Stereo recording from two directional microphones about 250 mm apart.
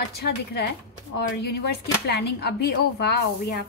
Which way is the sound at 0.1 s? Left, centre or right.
Left.